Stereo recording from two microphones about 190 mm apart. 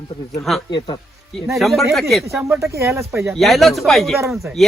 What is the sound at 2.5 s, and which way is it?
Speech, 15° right (ahead or behind).